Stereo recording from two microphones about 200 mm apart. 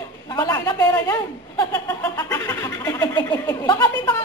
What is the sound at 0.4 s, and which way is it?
Speech, 15° left (ahead or behind).